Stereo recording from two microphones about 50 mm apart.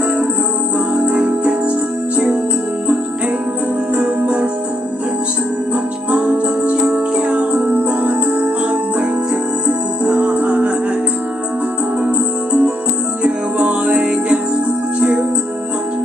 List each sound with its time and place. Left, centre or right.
0.7 s music: right
3.9 s music: right
6.1 s music: right
9.7 s music: right
12.0 s music: right